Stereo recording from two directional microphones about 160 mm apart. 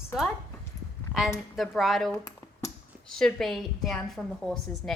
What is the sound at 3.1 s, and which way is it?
A woman's voice, 5° left (ahead or behind).